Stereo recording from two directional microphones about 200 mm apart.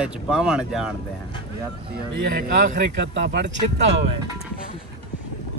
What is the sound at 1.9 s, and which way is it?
Speech, 45° right (ahead or behind).